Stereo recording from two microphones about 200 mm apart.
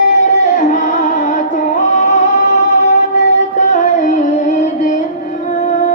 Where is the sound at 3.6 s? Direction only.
40° left (ahead or behind).